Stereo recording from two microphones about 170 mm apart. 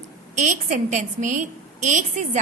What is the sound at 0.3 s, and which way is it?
A woman's voice, 45° right (ahead or behind).